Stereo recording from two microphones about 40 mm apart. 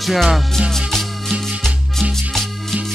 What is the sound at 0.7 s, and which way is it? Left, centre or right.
Music, centre.